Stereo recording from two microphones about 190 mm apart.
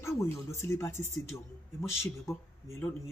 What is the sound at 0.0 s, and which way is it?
Speech, 15° left (ahead or behind).